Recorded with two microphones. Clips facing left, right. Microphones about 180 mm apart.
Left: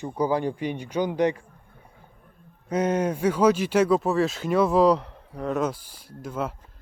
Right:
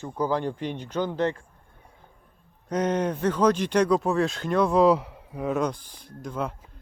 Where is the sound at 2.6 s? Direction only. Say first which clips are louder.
Left 1 dB; 10° left (ahead or behind).